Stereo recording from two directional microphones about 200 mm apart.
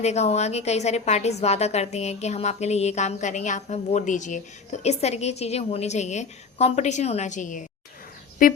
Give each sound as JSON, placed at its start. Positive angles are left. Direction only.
{"t": 0.0, "sound": "a woman's voice", "side_deg": 35}